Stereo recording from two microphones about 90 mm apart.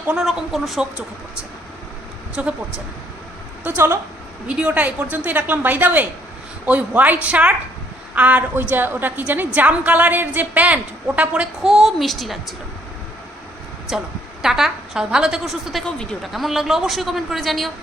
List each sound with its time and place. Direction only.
0.1 s speech: 5° right (ahead or behind)
2.3 s a woman's voice: 15° right (ahead or behind)
3.6 s a woman's voice: 20° right (ahead or behind)
11.6 s speech: 5° right (ahead or behind)
13.9 s speech: 5° right (ahead or behind)